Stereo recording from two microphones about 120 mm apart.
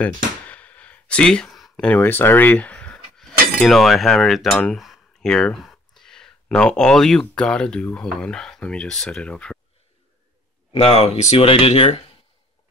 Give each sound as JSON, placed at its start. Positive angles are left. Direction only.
{"t": 0.0, "sound": "a sound", "side_deg": 10}
{"t": 2.0, "sound": "speech", "side_deg": 20}
{"t": 10.7, "sound": "speech", "side_deg": 60}